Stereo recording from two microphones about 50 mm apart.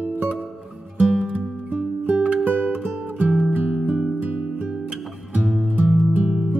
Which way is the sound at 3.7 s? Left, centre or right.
Centre.